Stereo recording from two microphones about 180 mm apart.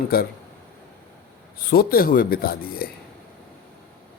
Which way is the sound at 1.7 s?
55° left (ahead or behind).